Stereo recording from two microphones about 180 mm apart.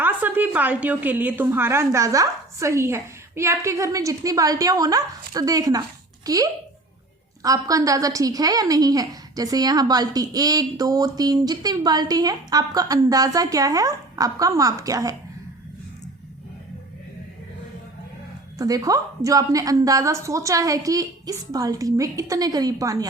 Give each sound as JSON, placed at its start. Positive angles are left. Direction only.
{"t": 0.0, "sound": "a woman's voice", "side_deg": -10}
{"t": 18.6, "sound": "a woman's voice", "side_deg": -20}